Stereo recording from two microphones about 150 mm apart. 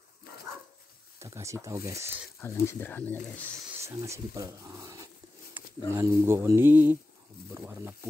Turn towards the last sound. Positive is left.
turn(degrees=-15)  # may be behind; listen again after turning